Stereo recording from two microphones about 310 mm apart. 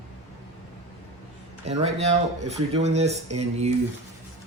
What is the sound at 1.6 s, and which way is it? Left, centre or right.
Speech, right.